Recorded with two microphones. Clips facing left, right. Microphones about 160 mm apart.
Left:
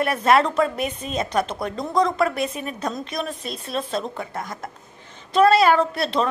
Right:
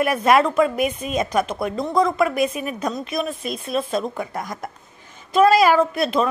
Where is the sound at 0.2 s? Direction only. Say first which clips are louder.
Right 1 dB; 10° right (ahead or behind).